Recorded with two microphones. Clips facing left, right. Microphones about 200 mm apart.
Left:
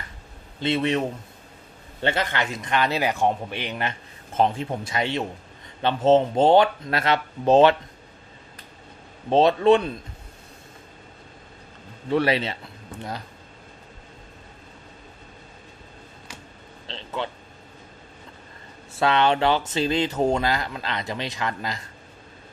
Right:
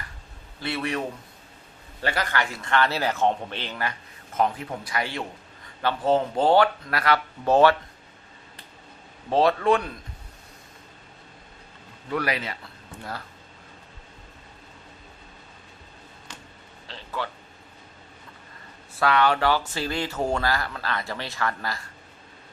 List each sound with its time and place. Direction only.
0.6 s a man's voice: 20° left (ahead or behind)
9.3 s a man's voice: 20° left (ahead or behind)
12.1 s a man's voice: 25° left (ahead or behind)
16.8 s a sound: 25° left (ahead or behind)
18.9 s a man's voice: 25° left (ahead or behind)